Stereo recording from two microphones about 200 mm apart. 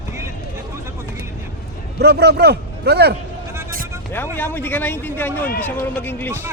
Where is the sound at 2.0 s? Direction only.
55° right (ahead or behind).